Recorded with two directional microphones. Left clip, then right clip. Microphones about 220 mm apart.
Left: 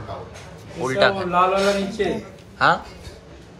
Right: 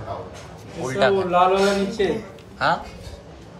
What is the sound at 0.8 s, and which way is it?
Speech, 10° right (ahead or behind).